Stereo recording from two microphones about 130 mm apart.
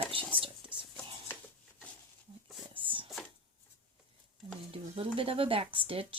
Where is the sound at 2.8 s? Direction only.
40° right (ahead or behind).